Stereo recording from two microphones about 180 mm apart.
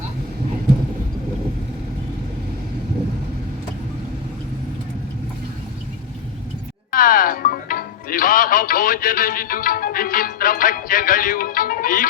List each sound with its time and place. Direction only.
6.9 s speech: 50° left (ahead or behind)